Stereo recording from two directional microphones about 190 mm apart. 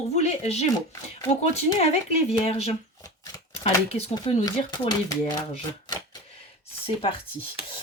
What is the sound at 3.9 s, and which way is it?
Speech, 35° left (ahead or behind).